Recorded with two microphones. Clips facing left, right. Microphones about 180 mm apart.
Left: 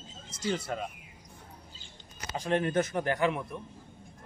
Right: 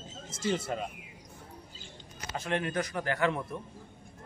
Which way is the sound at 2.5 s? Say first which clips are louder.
Left 5 dB; 30° left (ahead or behind).